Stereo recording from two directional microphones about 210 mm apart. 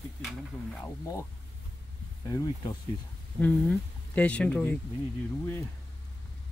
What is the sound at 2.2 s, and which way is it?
Speech, 15° left (ahead or behind).